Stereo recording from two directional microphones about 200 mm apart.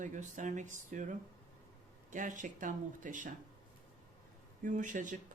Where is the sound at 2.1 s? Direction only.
40° right (ahead or behind).